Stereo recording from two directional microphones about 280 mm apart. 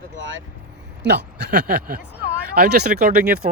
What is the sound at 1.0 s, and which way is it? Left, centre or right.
Speech, right.